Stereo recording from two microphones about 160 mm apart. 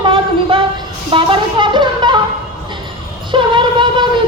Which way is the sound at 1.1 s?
30° right (ahead or behind).